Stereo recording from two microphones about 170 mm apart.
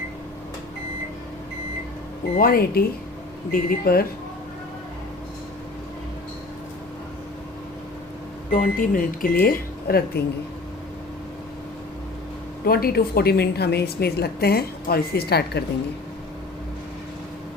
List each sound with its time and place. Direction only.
2.4 s speech: 65° left (ahead or behind)
8.4 s speech: 55° left (ahead or behind)
12.6 s a woman's voice: 60° left (ahead or behind)